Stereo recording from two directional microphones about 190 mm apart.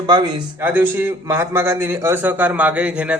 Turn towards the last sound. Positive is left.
turn(degrees=-5)  # may be behind; listen again after turning